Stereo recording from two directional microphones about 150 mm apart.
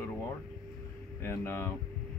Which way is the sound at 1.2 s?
15° left (ahead or behind).